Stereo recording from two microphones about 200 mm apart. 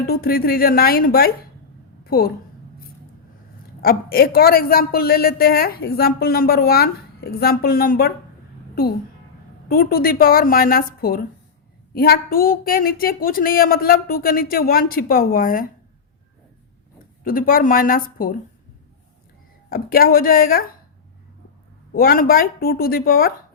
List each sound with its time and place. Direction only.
0.1 s a woman's voice: 50° left (ahead or behind)
3.8 s a woman's voice: 50° left (ahead or behind)
9.6 s a woman's voice: 50° left (ahead or behind)
17.2 s a woman's voice: 45° left (ahead or behind)
19.7 s a woman's voice: 50° left (ahead or behind)
21.9 s a woman's voice: 45° left (ahead or behind)